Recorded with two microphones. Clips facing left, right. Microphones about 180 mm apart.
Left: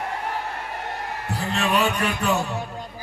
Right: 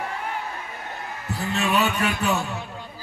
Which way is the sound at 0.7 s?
70° left (ahead or behind).